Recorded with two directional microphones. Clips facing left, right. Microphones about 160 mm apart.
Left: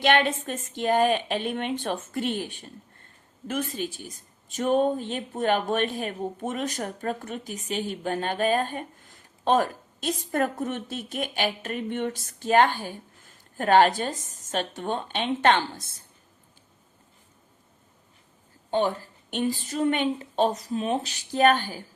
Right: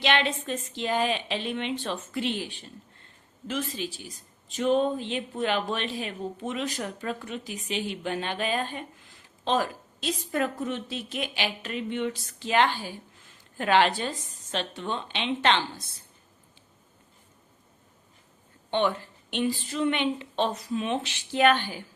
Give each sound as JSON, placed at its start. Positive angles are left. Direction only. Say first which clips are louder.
{"t": 0.0, "sound": "speech", "louder": "left 4 dB", "side_deg": 50}
{"t": 18.7, "sound": "speech", "louder": "left 1 dB", "side_deg": 40}